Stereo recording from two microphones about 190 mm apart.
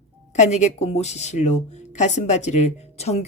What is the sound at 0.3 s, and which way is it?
Speech, 40° left (ahead or behind).